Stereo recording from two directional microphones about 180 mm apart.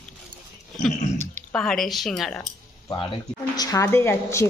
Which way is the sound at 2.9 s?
25° left (ahead or behind).